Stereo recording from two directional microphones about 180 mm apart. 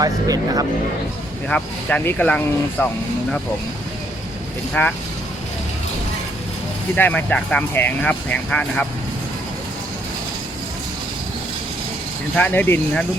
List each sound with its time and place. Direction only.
0.0 s speech: 20° right (ahead or behind)
1.5 s speech: 5° left (ahead or behind)
4.7 s speech: 10° left (ahead or behind)
6.9 s speech: 10° left (ahead or behind)
12.4 s speech: 10° left (ahead or behind)